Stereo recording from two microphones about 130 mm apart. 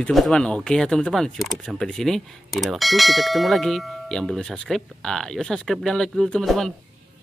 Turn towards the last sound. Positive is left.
turn(degrees=0)  # may be behind; listen again after turning